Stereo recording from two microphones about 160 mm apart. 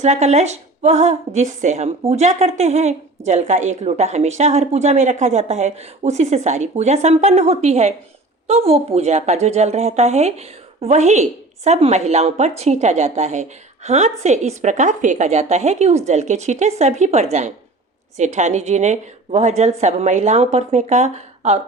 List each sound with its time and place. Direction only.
0.0 s a woman's voice: 45° right (ahead or behind)